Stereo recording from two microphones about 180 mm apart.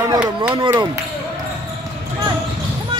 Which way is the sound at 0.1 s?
25° right (ahead or behind).